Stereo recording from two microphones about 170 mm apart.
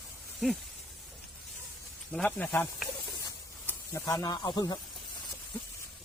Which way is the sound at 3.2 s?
20° left (ahead or behind).